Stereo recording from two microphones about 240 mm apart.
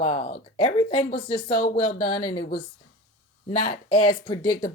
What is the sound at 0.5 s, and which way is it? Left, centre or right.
Speech, left.